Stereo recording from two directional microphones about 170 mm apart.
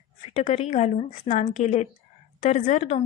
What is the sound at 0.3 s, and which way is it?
A woman's voice, 45° left (ahead or behind).